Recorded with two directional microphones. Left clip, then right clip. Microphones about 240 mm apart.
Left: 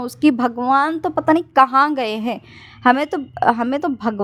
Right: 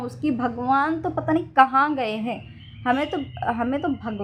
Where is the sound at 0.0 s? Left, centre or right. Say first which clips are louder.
Left 8 dB; left.